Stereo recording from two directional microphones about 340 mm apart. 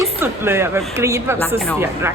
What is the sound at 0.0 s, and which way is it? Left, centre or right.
A woman's voice, centre.